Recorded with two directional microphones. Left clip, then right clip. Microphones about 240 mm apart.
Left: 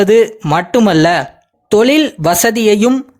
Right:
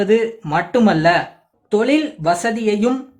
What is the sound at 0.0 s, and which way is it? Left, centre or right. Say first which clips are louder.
Speech: left 7 dB; left.